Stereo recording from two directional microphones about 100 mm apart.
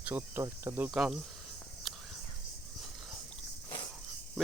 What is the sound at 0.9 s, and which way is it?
Speech, 5° right (ahead or behind).